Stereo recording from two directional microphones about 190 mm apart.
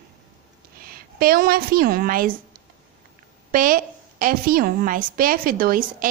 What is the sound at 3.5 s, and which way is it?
A woman's voice, 45° right (ahead or behind).